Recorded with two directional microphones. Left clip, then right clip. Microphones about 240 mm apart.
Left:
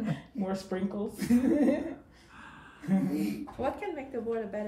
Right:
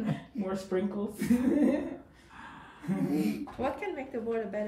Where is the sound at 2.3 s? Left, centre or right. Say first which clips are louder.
Right 2 dB; right.